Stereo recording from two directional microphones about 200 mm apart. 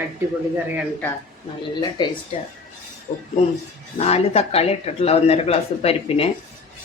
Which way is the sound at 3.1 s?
25° left (ahead or behind).